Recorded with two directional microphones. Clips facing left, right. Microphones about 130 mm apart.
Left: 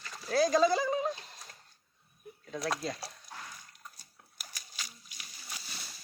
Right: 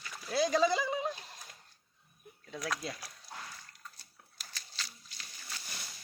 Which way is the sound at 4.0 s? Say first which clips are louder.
Left 2 dB; 15° left (ahead or behind).